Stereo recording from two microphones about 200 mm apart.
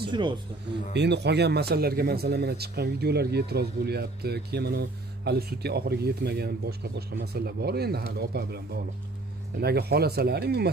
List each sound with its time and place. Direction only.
0.1 s speech: 25° right (ahead or behind)
0.9 s speech: 60° right (ahead or behind)